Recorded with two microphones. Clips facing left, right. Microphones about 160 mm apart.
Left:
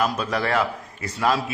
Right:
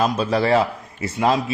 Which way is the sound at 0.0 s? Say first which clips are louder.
Right 4 dB; 25° right (ahead or behind).